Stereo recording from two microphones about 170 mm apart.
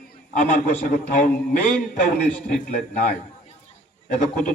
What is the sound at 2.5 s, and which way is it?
Speech, 50° left (ahead or behind).